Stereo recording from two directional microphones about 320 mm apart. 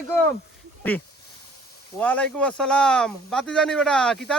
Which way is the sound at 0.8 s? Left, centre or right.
Centre.